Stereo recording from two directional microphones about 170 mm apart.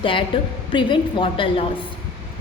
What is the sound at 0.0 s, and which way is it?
A woman's voice, 30° left (ahead or behind).